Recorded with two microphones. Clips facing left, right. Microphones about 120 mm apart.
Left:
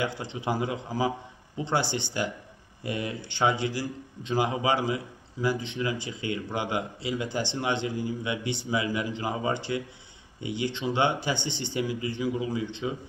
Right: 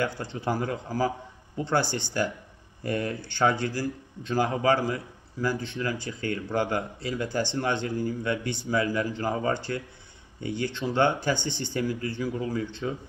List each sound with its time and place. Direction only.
0.0 s a man's voice: 15° left (ahead or behind)